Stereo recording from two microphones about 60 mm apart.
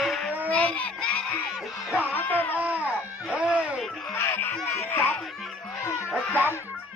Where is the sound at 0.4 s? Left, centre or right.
Left.